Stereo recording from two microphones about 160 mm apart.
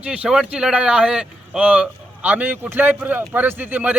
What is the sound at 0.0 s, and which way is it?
A man's voice, 5° right (ahead or behind).